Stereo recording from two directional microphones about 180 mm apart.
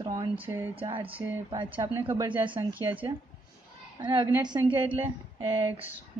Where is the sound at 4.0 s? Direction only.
25° right (ahead or behind).